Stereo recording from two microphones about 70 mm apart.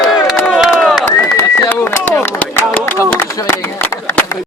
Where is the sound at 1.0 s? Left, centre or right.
Left.